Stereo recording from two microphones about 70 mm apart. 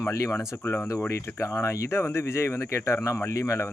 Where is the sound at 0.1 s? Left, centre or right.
Left.